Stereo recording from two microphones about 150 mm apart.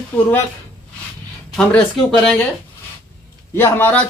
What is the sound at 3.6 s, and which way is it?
Speech, 15° left (ahead or behind).